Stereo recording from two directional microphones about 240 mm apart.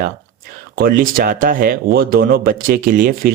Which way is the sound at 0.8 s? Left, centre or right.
Right.